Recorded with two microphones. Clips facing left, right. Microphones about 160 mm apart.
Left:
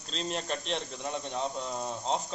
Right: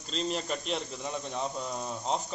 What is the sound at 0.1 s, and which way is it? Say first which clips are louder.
Speech: right 2 dB; centre (ahead or behind).